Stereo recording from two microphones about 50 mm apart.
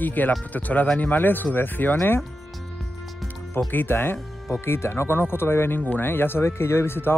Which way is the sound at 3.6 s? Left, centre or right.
Left.